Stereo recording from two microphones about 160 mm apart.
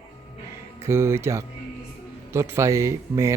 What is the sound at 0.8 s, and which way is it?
A man's voice, 15° right (ahead or behind).